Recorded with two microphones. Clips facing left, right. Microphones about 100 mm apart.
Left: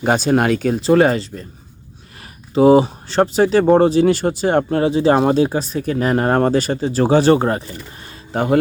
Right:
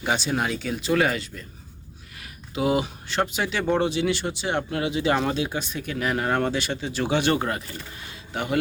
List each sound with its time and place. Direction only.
0.0 s speech: 45° left (ahead or behind)
0.7 s speech: 35° left (ahead or behind)
2.6 s speech: 35° left (ahead or behind)
8.0 s a sound: 40° left (ahead or behind)